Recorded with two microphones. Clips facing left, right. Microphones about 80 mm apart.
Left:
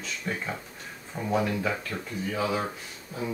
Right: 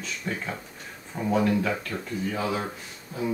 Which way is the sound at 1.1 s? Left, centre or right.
Centre.